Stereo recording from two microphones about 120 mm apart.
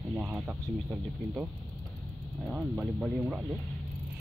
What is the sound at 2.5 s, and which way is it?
Speech, 10° right (ahead or behind).